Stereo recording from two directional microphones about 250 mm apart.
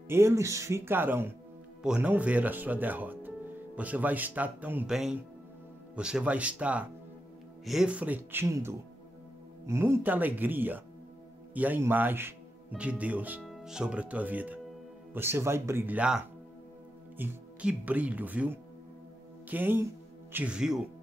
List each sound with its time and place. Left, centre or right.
0.1 s speech: centre
17.2 s speech: centre